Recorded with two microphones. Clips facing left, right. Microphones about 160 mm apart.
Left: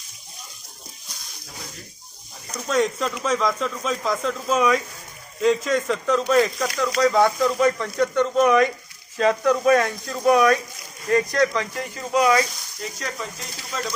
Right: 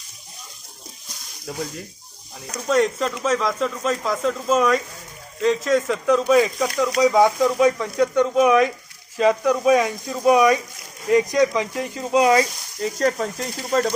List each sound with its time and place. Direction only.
2.6 s speech: centre (ahead or behind); by 12.5 s 25° right (ahead or behind)
12.8 s speech: 45° right (ahead or behind)